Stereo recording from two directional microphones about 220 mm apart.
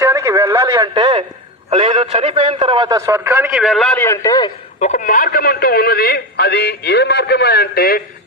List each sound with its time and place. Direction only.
0.0 s a man's voice: 15° right (ahead or behind); by 4.5 s 15° left (ahead or behind)
4.8 s a man's voice: 35° left (ahead or behind)